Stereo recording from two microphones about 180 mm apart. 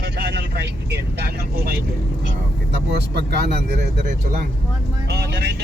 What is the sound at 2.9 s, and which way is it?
Speech, 65° right (ahead or behind).